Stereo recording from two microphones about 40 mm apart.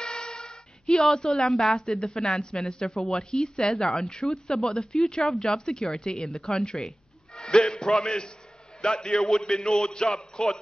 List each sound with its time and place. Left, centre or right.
0.0 s a sound: centre
1.1 s a woman's voice: centre
1.9 s a woman's voice: centre
7.3 s music: centre
8.0 s a woman's voice: left